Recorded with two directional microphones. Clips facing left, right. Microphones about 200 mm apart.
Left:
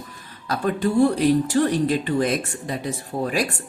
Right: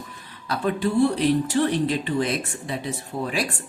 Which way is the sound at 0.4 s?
45° left (ahead or behind).